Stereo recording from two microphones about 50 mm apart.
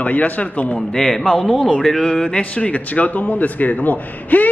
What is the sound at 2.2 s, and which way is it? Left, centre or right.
A man's voice, left.